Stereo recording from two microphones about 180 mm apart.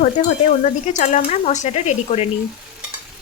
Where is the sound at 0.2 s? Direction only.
40° left (ahead or behind).